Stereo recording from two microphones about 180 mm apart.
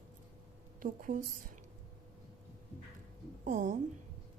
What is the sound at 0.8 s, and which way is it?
Speech, 50° right (ahead or behind).